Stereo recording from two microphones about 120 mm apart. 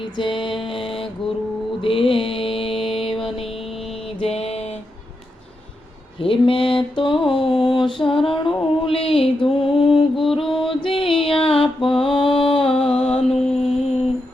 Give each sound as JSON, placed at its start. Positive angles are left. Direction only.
{"t": 0.0, "sound": "music", "side_deg": 45}
{"t": 1.8, "sound": "mantra", "side_deg": 50}
{"t": 4.2, "sound": "music", "side_deg": 55}
{"t": 6.1, "sound": "mantra", "side_deg": 50}
{"t": 9.9, "sound": "music", "side_deg": 0}
{"t": 10.7, "sound": "mantra", "side_deg": 45}
{"t": 11.9, "sound": "music", "side_deg": 50}